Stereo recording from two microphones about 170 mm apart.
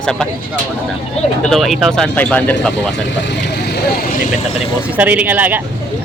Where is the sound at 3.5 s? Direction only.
75° left (ahead or behind).